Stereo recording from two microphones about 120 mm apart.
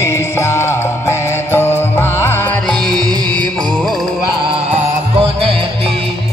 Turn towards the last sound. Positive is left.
turn(degrees=-55)  # may be behind; listen again after turning